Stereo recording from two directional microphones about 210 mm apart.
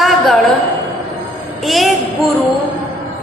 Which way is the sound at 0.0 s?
Centre (ahead or behind).